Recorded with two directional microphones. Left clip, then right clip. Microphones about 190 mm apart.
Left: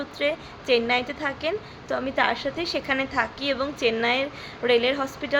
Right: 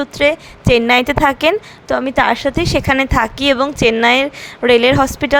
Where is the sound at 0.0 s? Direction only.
55° right (ahead or behind).